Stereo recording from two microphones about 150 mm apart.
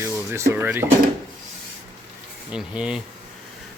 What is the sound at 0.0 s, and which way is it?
Speech, 20° right (ahead or behind).